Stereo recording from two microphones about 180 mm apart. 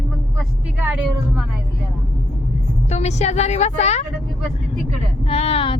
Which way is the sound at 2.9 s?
35° left (ahead or behind).